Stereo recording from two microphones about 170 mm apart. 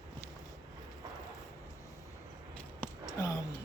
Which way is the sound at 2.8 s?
20° left (ahead or behind).